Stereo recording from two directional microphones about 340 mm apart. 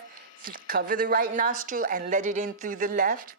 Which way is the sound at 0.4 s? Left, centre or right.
Right.